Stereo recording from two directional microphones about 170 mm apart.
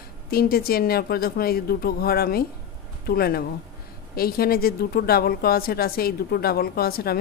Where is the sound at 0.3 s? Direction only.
60° left (ahead or behind).